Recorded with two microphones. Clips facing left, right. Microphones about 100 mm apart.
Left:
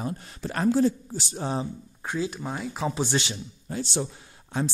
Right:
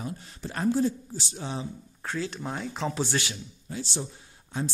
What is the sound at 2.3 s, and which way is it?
Speech, 5° left (ahead or behind).